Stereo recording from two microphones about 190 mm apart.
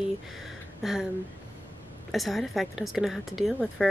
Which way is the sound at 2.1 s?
Centre (ahead or behind).